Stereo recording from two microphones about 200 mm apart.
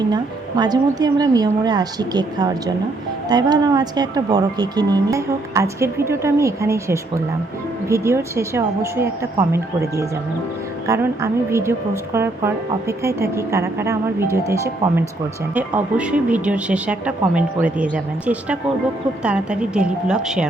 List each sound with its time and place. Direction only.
0.1 s speech: 20° right (ahead or behind)
10.8 s a woman's voice: 15° right (ahead or behind)